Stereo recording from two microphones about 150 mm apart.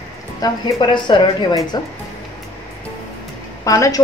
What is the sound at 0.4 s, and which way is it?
A woman's voice, 30° left (ahead or behind).